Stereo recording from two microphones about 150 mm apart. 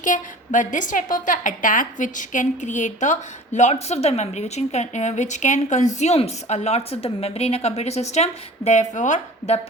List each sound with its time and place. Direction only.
0.0 s a woman's voice: 55° left (ahead or behind)